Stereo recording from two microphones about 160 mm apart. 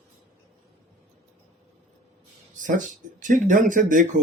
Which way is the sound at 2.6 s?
55° right (ahead or behind).